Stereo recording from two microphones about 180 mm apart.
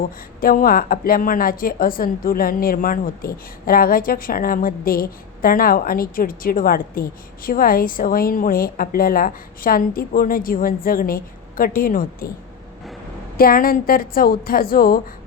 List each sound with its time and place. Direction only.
0.0 s a woman's voice: 55° left (ahead or behind)
13.3 s a woman's voice: 55° left (ahead or behind)